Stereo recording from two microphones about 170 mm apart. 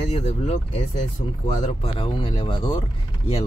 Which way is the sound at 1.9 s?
30° left (ahead or behind).